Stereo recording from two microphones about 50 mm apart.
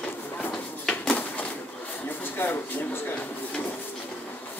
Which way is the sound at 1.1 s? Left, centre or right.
Left.